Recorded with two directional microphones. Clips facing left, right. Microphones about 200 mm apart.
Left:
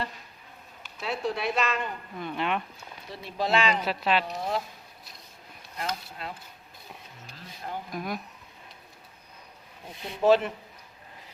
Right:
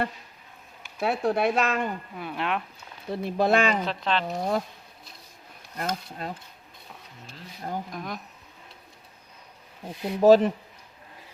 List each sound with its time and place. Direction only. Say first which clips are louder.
0.9 s speech: right 6 dB; 55° right (ahead or behind)
2.1 s speech: left 3 dB; 5° right (ahead or behind)
3.1 s speech: right 5 dB; 50° right (ahead or behind)
3.8 s speech: left 1 dB; 10° left (ahead or behind)
4.4 s speech: right 4 dB; 45° right (ahead or behind)
5.7 s speech: right 3 dB; 45° right (ahead or behind)
7.9 s speech: left 2 dB; 5° left (ahead or behind)
10.2 s speech: right 5 dB; 40° right (ahead or behind)